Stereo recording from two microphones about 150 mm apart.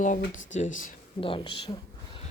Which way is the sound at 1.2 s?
35° left (ahead or behind).